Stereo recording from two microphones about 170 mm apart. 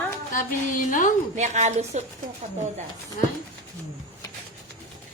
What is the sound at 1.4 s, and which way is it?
Speech, 40° right (ahead or behind).